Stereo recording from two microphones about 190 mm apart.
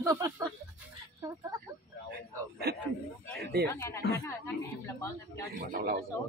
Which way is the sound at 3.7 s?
15° left (ahead or behind).